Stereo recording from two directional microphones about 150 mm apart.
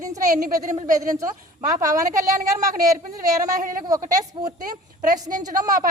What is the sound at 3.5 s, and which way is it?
Speech, 65° right (ahead or behind).